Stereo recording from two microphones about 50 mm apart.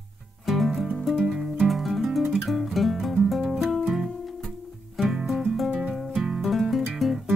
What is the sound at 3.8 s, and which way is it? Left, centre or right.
Music, centre.